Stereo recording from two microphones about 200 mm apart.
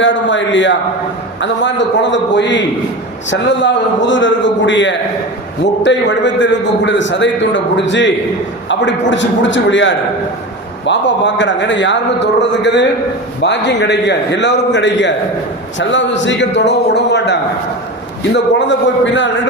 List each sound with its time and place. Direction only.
0.0 s a man's voice: 70° left (ahead or behind)